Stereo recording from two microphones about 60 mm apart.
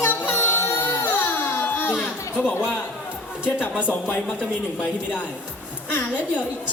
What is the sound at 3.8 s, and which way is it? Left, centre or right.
A woman's voice, left.